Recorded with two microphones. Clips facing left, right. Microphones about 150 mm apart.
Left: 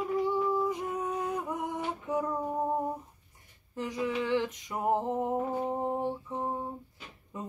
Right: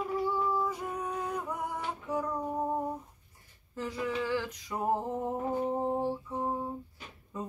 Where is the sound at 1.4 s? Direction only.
20° left (ahead or behind).